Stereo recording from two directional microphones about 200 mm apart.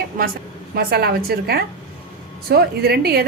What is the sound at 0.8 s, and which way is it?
A woman's voice, 50° right (ahead or behind).